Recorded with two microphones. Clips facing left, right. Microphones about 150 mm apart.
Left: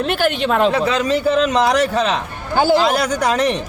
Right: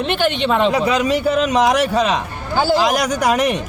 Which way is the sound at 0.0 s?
5° left (ahead or behind).